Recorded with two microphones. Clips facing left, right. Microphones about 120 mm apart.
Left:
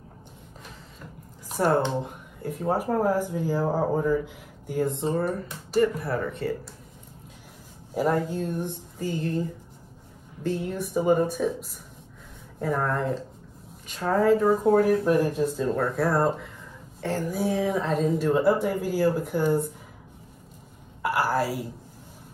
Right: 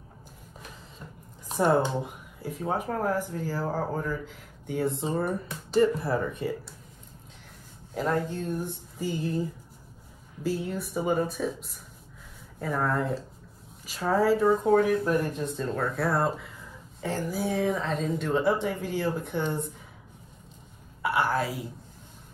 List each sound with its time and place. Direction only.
1.6 s speech: 15° right (ahead or behind)
2.0 s speech: 5° right (ahead or behind); by 4.2 s 15° left (ahead or behind)
4.3 s speech: centre (ahead or behind)
5.8 s speech: 25° right (ahead or behind)
7.9 s a woman's voice: 5° left (ahead or behind)
21.0 s a woman's voice: centre (ahead or behind)